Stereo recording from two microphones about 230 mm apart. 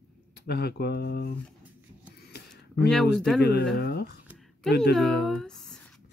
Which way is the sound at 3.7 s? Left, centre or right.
Left.